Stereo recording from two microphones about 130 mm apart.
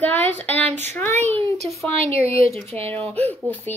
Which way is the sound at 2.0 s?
50° right (ahead or behind).